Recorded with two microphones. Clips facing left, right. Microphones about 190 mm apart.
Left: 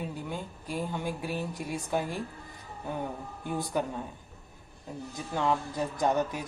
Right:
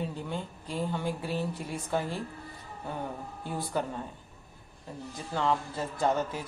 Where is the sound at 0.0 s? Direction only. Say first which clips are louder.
Right 1 dB; 10° left (ahead or behind).